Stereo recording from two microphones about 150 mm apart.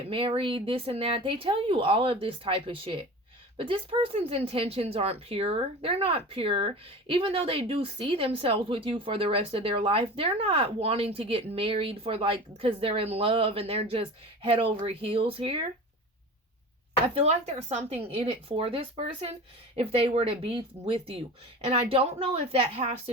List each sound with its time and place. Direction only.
0.1 s speech: 35° right (ahead or behind)
17.2 s a woman's voice: 45° right (ahead or behind)